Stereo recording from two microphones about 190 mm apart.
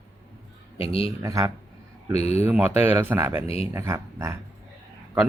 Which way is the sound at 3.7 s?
15° right (ahead or behind).